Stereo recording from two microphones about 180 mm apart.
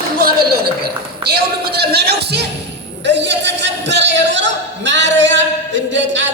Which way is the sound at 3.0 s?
75° right (ahead or behind).